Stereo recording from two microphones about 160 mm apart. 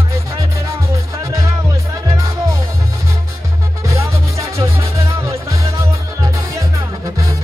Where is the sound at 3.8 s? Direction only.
20° right (ahead or behind).